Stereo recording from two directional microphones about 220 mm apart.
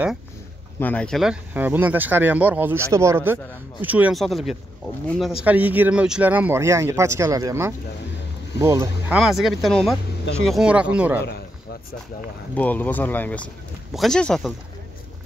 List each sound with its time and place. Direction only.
0.7 s speech: 5° left (ahead or behind); by 9.2 s 15° right (ahead or behind)
9.2 s speech: centre (ahead or behind)
12.5 s speech: 5° left (ahead or behind)